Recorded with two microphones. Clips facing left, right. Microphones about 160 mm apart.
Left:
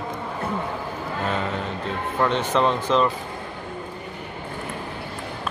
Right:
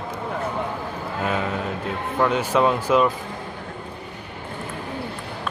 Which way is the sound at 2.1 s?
5° right (ahead or behind).